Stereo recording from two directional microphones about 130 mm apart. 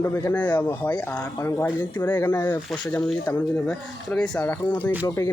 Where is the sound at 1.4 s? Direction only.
25° left (ahead or behind).